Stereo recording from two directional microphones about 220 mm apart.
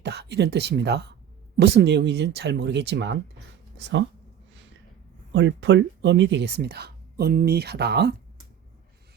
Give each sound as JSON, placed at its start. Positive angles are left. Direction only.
{"t": 0.0, "sound": "speech", "side_deg": -50}
{"t": 5.3, "sound": "speech", "side_deg": -55}